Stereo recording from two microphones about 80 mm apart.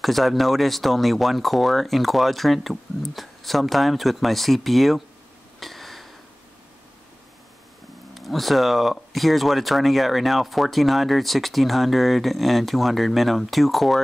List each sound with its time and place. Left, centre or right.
0.0 s speech: centre
5.6 s a sound: centre
8.1 s speech: centre